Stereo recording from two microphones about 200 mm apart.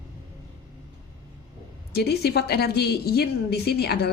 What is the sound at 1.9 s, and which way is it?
A woman's voice, 55° left (ahead or behind).